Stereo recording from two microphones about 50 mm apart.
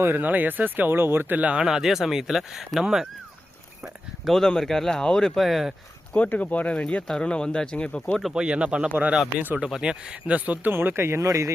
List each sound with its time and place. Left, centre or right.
0.0 s speech: right
1.4 s speech: right
1.6 s speech: centre
4.3 s speech: centre
5.4 s speech: centre
6.1 s speech: left
8.3 s speech: centre
9.6 s speech: centre
10.3 s speech: right
10.7 s speech: right